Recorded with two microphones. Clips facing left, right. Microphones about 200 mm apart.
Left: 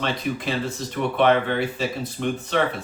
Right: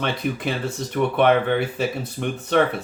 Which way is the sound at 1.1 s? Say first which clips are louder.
Right 1 dB; 55° right (ahead or behind).